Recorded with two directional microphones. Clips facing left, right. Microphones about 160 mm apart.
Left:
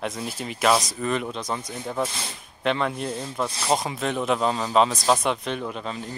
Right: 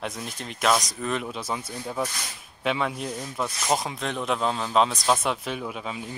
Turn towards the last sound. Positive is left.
turn(degrees=-5)  # may be behind; listen again after turning